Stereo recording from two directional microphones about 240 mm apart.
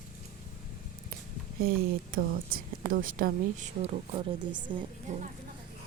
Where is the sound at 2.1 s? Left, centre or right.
Right; by 4.8 s centre.